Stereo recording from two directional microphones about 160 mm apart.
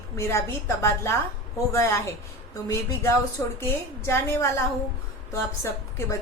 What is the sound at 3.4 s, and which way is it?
A woman's voice, 15° left (ahead or behind).